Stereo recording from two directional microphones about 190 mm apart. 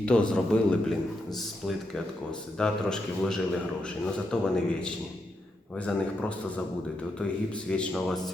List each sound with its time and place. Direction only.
0.0 s a man's voice: 5° left (ahead or behind)
2.6 s a man's voice: 5° left (ahead or behind)
7.7 s a man's voice: 5° left (ahead or behind)